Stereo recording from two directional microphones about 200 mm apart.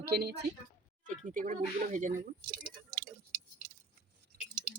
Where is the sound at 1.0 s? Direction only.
40° right (ahead or behind).